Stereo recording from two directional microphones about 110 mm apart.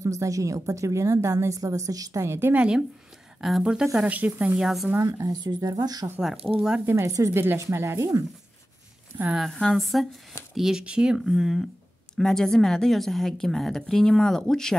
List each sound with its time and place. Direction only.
0.0 s a woman's voice: 30° right (ahead or behind); by 2.8 s 15° right (ahead or behind)
3.3 s a woman's voice: 5° right (ahead or behind)
5.0 s speech: 35° right (ahead or behind)
6.4 s a woman's voice: 5° right (ahead or behind)
6.9 s a woman's voice: 30° right (ahead or behind)
9.4 s a woman's voice: centre (ahead or behind)